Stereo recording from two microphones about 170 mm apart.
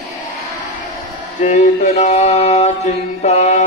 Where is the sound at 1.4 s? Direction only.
45° left (ahead or behind).